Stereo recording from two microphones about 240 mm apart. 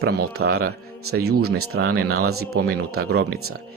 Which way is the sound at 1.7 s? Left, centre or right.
Right.